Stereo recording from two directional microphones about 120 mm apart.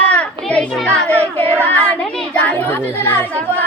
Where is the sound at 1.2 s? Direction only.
55° right (ahead or behind).